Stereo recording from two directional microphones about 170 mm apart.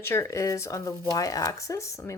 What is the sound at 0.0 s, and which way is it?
A woman's voice, 15° left (ahead or behind).